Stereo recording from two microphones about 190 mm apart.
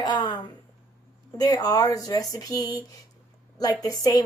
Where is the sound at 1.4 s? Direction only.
20° left (ahead or behind).